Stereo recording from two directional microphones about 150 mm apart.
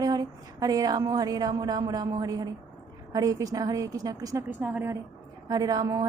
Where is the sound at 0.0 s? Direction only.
25° right (ahead or behind).